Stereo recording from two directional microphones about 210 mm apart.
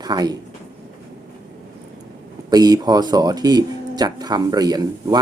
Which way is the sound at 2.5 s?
20° right (ahead or behind).